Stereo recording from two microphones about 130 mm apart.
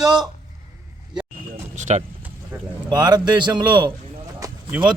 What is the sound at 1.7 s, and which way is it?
Speech, 65° right (ahead or behind).